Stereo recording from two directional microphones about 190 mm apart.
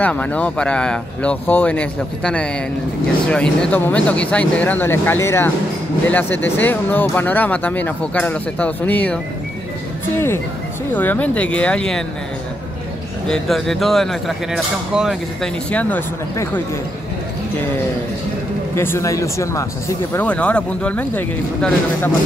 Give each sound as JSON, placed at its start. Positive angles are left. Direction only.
{"t": 0.0, "sound": "speech", "side_deg": 5}
{"t": 11.0, "sound": "speech", "side_deg": 10}
{"t": 13.3, "sound": "speech", "side_deg": 0}
{"t": 18.8, "sound": "speech", "side_deg": 15}